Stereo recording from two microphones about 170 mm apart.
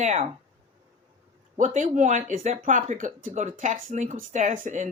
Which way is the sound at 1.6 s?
45° right (ahead or behind).